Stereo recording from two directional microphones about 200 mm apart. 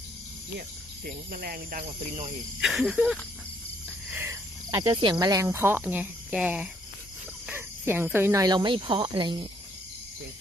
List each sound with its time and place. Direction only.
0.6 s speech: 50° right (ahead or behind)
2.0 s speech: 30° right (ahead or behind)
2.6 s speech: centre (ahead or behind)
4.1 s cricket: 15° right (ahead or behind)
4.8 s speech: 25° right (ahead or behind)